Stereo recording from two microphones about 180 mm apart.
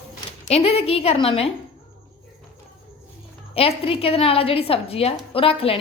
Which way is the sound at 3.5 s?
30° left (ahead or behind).